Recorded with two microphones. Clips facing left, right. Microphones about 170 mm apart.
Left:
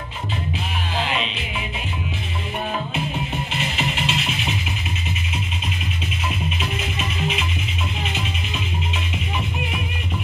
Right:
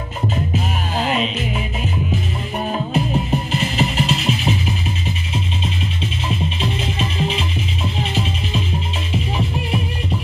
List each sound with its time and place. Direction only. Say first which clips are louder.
0.9 s music: right 5 dB; 45° right (ahead or behind)
2.9 s music: right 7 dB; 40° right (ahead or behind)
6.2 s music: right 4 dB; 30° right (ahead or behind)